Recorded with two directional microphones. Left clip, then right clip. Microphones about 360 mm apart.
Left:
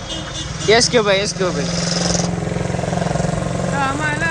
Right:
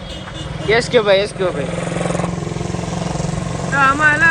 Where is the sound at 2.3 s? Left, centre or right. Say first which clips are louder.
Left 2 dB; centre.